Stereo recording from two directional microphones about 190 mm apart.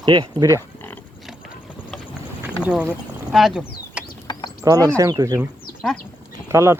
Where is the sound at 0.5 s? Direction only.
10° left (ahead or behind).